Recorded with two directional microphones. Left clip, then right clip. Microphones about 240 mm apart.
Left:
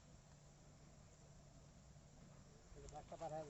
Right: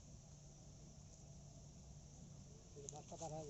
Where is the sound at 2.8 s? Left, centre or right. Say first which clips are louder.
Left 1 dB; left.